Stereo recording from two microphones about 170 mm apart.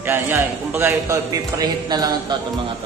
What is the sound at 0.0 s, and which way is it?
A man's voice, 10° right (ahead or behind).